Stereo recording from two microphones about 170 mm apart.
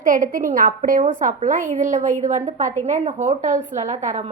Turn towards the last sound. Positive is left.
turn(degrees=-45)  # may be behind; listen again after turning